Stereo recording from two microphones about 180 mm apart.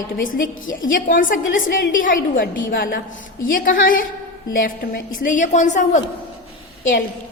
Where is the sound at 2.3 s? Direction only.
90° left.